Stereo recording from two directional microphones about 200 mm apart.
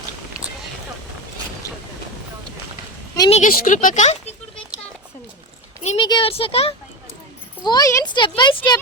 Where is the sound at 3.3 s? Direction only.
45° left (ahead or behind).